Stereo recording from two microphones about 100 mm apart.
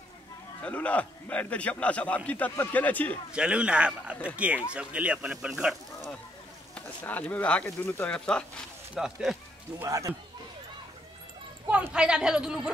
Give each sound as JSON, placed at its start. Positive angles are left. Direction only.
{"t": 0.6, "sound": "a man's voice", "side_deg": 15}
{"t": 3.3, "sound": "speech", "side_deg": -10}
{"t": 6.7, "sound": "a man's voice", "side_deg": 15}
{"t": 8.9, "sound": "speech", "side_deg": -5}
{"t": 9.8, "sound": "a man's voice", "side_deg": -30}
{"t": 11.9, "sound": "speech", "side_deg": -10}